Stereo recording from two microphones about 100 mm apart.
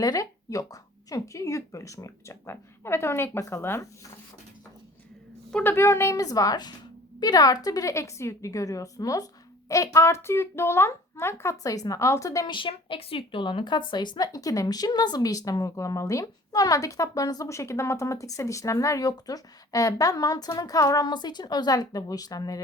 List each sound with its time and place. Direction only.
0.0 s speech: 35° left (ahead or behind)
5.6 s speech: 25° left (ahead or behind)
12.5 s speech: 55° left (ahead or behind); by 22.6 s 35° left (ahead or behind)